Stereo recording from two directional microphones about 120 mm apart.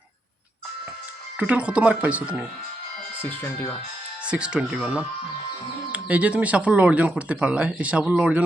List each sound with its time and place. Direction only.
1.4 s speech: 10° right (ahead or behind)
3.2 s speech: 15° left (ahead or behind)
4.3 s speech: 10° right (ahead or behind)